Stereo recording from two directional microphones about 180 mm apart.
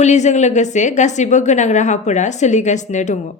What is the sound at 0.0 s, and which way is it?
A woman's voice, 40° left (ahead or behind).